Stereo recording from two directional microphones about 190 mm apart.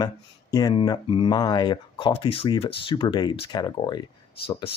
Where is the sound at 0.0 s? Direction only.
20° left (ahead or behind).